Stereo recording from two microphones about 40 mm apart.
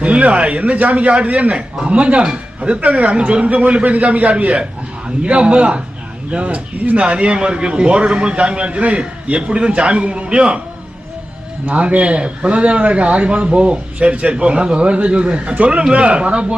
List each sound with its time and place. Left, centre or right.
0.0 s a man's voice: right
5.0 s a man's voice: right
11.6 s a man's voice: right